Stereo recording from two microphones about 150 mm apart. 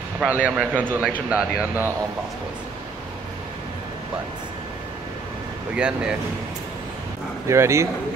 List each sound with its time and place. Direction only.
0.2 s a man's voice: centre (ahead or behind)
0.6 s speech: 10° right (ahead or behind)
5.8 s speech: 5° right (ahead or behind)
7.4 s speech: 20° right (ahead or behind)